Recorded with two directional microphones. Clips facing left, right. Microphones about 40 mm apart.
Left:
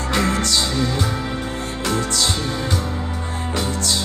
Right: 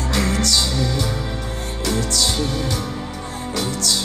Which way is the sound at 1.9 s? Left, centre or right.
Left.